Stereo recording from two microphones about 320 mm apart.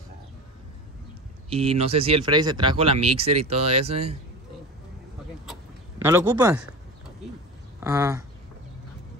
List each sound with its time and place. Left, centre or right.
1.5 s speech: centre
5.9 s speech: centre
7.8 s speech: centre